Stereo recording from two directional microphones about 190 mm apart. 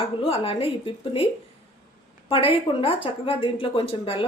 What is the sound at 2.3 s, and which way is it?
A woman's voice, 30° left (ahead or behind).